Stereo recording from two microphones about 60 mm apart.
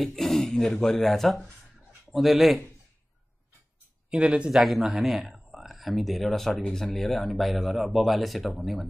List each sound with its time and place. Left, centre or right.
0.0 s speech: centre
1.8 s a sound: centre
4.1 s speech: centre
4.6 s speech: centre